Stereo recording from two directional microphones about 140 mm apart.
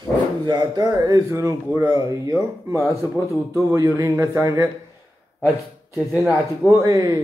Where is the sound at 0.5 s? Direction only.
30° right (ahead or behind).